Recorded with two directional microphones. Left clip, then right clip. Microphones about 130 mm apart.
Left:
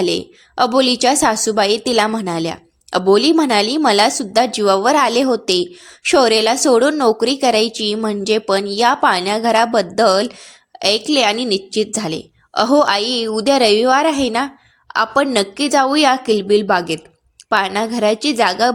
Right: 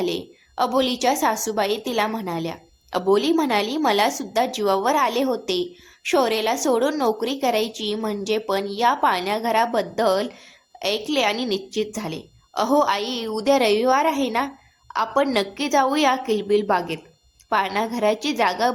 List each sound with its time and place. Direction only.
0.0 s a woman's voice: 55° left (ahead or behind)